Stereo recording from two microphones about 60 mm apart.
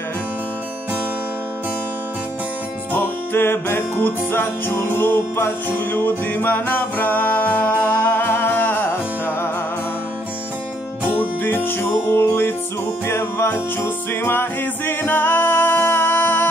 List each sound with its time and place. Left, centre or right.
2.9 s music: left
11.1 s music: left